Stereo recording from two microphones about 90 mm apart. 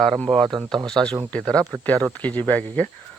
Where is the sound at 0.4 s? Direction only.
50° right (ahead or behind).